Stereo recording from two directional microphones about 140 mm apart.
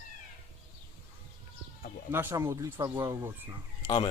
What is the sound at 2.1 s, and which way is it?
Speech, 15° right (ahead or behind).